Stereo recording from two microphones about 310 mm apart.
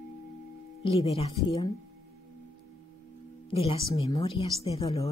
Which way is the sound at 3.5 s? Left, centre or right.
Centre.